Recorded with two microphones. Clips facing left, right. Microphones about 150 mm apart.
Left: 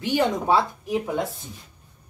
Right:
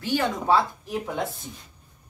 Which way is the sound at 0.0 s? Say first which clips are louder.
Left 3 dB; 20° left (ahead or behind).